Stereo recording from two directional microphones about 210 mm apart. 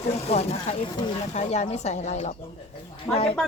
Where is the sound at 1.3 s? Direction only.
35° left (ahead or behind).